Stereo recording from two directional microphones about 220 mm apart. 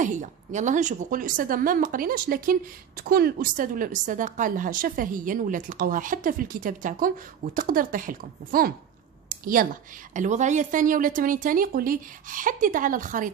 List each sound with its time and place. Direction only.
0.0 s a woman's voice: 35° right (ahead or behind)